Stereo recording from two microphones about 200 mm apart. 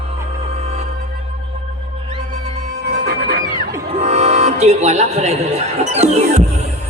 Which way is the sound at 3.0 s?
50° right (ahead or behind).